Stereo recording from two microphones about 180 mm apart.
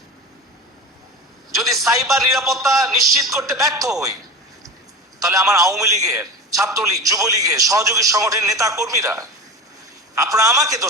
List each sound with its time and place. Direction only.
1.7 s a sound: centre (ahead or behind)
2.4 s speech: centre (ahead or behind)
3.6 s speech: 20° right (ahead or behind)
5.2 s a man's voice: 20° right (ahead or behind)